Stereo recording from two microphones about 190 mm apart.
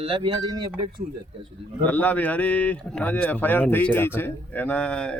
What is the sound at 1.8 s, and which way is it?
Speech, 10° left (ahead or behind).